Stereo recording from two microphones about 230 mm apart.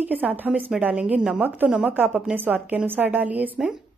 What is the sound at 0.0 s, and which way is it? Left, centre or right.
A woman's voice, centre.